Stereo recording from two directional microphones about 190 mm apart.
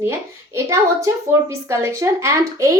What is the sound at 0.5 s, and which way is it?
A woman's voice, 15° right (ahead or behind).